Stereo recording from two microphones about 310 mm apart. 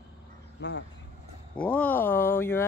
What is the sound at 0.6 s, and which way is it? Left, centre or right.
Speech, left.